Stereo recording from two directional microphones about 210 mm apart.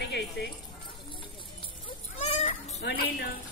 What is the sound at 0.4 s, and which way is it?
Speech, 50° left (ahead or behind).